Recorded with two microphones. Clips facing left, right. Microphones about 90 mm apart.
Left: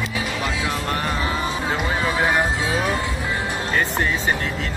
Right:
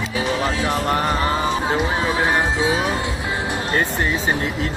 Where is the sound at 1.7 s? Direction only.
25° right (ahead or behind).